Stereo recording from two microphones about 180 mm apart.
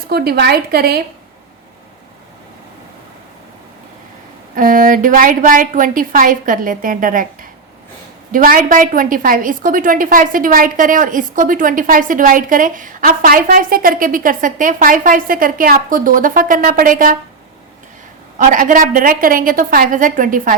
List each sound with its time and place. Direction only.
0.1 s a woman's voice: 60° right (ahead or behind)
4.5 s a woman's voice: 50° right (ahead or behind)
8.3 s a woman's voice: 50° right (ahead or behind)
18.3 s a woman's voice: 50° right (ahead or behind)